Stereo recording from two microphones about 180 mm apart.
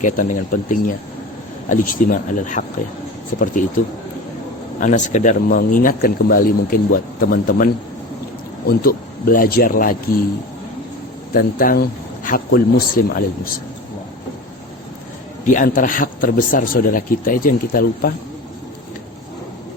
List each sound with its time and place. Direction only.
0.0 s speech: 45° left (ahead or behind)
4.8 s speech: 45° left (ahead or behind)
11.3 s speech: 55° left (ahead or behind)
15.4 s speech: 45° left (ahead or behind)